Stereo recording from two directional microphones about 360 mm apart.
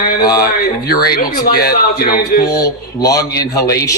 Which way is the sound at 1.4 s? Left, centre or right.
Left.